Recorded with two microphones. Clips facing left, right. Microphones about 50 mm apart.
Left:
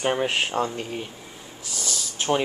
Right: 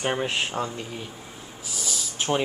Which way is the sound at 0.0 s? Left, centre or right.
Centre.